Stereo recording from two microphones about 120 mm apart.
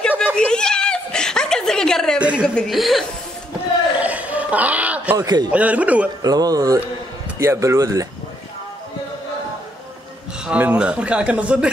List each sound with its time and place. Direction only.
0.4 s snicker: 5° left (ahead or behind)
2.1 s a woman's voice: 10° right (ahead or behind)
2.4 s speech: 5° left (ahead or behind)
4.0 s a sound: 10° right (ahead or behind)
5.1 s speech: 35° right (ahead or behind)
5.5 s a man's voice: 10° right (ahead or behind)
6.2 s speech: 30° right (ahead or behind)
10.4 s a man's voice: 10° right (ahead or behind)